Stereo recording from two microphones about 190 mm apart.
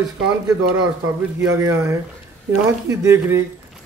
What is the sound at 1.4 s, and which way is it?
A man's voice, 15° right (ahead or behind).